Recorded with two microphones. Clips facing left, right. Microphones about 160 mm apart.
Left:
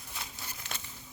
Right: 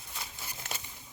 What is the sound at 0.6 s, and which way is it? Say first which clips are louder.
Crumpling: right 2 dB; 50° right (ahead or behind).